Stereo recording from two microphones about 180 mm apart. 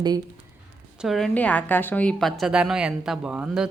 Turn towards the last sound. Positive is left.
turn(degrees=-5)  # may be behind; listen again after turning